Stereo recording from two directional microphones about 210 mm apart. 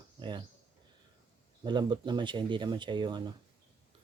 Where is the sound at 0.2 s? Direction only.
20° right (ahead or behind).